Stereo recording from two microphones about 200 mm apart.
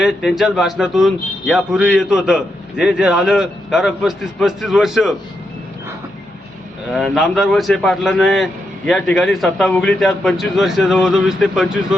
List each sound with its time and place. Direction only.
0.0 s a man's voice: centre (ahead or behind)
6.9 s a man's voice: centre (ahead or behind)